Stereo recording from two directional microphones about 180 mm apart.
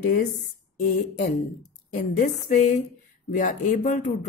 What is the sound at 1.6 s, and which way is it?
Speech, 50° left (ahead or behind).